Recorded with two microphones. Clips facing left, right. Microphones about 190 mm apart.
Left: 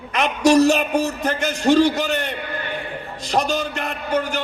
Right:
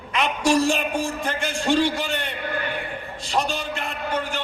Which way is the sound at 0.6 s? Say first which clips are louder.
Left 6 dB; 40° left (ahead or behind).